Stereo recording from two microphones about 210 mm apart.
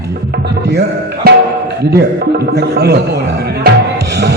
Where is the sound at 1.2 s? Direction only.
45° right (ahead or behind).